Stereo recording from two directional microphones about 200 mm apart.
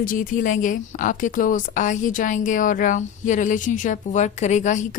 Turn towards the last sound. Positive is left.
turn(degrees=35)  # may be behind; listen again after turning